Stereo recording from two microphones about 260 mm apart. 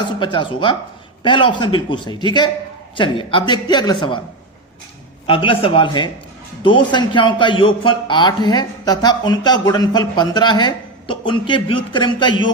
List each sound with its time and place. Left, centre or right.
0.2 s a man's voice: centre
5.2 s a man's voice: centre